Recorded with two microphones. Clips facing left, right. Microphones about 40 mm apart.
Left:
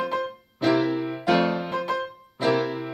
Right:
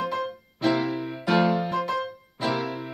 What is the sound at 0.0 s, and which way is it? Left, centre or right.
Music, centre.